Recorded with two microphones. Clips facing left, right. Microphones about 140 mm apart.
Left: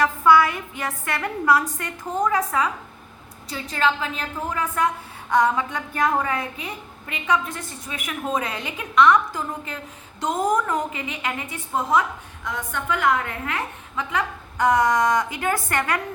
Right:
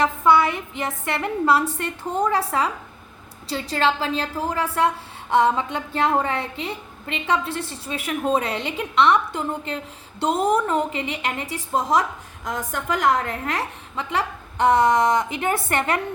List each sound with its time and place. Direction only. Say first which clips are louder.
0.0 s a woman's voice: even; 25° right (ahead or behind)